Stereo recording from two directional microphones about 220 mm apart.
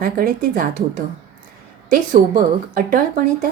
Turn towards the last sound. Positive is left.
turn(degrees=-40)  # may be behind; listen again after turning